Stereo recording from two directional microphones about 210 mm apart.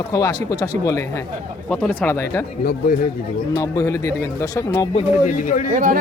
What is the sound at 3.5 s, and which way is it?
Speech, 15° left (ahead or behind).